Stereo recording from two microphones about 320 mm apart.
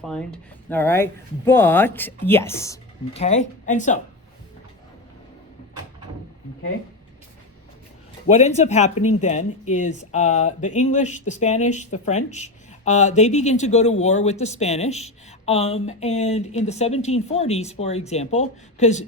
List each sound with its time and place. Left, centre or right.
0.0 s speech: centre; by 4.0 s left
8.3 s speech: left